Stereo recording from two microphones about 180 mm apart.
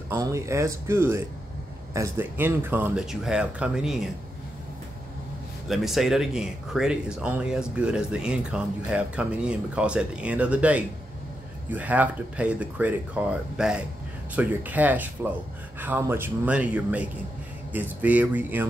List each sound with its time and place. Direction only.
0.1 s speech: 15° right (ahead or behind)
5.7 s speech: centre (ahead or behind)